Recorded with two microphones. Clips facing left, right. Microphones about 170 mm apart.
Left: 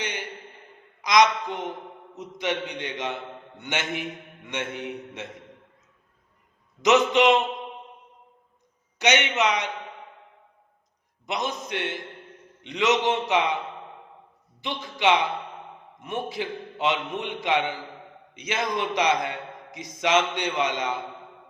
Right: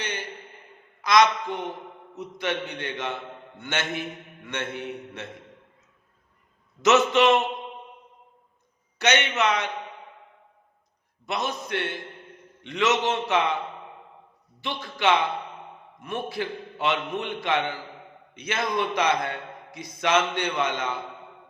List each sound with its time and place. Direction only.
0.0 s a sound: 15° left (ahead or behind)
1.0 s a man's voice: 15° left (ahead or behind)
6.8 s a man's voice: 15° left (ahead or behind)
9.0 s a man's voice: 15° left (ahead or behind)
11.3 s a man's voice: 15° left (ahead or behind)
14.6 s a man's voice: 15° left (ahead or behind)